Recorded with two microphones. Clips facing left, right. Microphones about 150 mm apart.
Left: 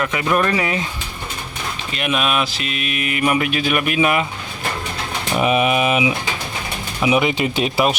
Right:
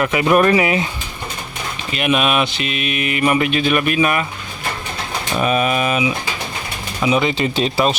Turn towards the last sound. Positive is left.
turn(degrees=10)  # may be behind; listen again after turning